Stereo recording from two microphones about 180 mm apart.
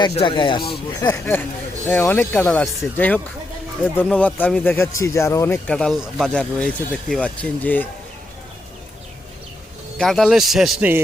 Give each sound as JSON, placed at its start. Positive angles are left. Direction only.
{"t": 0.0, "sound": "speech", "side_deg": 30}
{"t": 10.0, "sound": "a man's voice", "side_deg": 0}